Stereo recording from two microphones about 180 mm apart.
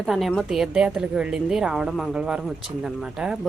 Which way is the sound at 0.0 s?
Centre (ahead or behind).